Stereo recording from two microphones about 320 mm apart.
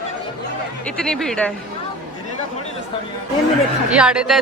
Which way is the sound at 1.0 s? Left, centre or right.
Centre.